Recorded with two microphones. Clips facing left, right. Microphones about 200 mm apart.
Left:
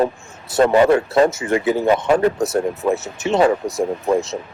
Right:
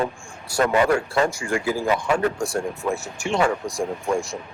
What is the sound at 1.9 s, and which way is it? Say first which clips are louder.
Speech: left 6 dB; 35° left (ahead or behind).